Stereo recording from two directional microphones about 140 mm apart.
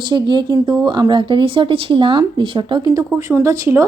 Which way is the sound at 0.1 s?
30° right (ahead or behind).